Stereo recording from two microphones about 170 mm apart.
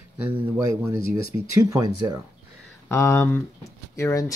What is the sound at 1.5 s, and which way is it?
Speech, 20° right (ahead or behind).